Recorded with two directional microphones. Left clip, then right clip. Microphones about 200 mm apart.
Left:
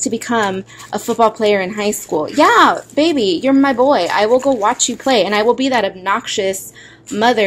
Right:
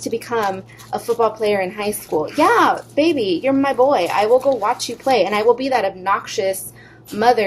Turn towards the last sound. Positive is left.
turn(degrees=35)  # may be behind; listen again after turning